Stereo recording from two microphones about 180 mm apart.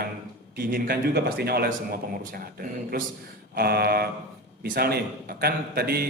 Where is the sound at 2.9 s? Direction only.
55° right (ahead or behind).